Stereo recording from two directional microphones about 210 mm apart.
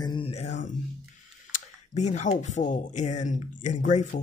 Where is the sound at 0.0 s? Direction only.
25° left (ahead or behind).